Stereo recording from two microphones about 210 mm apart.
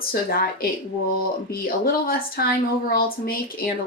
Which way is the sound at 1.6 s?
45° left (ahead or behind).